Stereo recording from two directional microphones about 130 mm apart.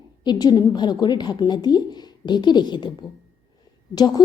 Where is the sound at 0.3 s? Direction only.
30° left (ahead or behind).